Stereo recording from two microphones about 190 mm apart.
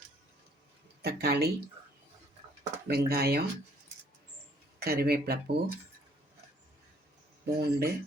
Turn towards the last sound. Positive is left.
turn(degrees=-55)  # may be behind; listen again after turning